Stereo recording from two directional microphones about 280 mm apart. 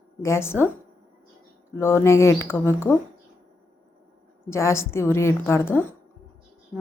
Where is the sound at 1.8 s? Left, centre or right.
Centre.